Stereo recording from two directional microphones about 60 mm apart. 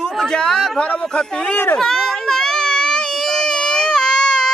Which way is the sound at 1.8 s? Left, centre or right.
Centre.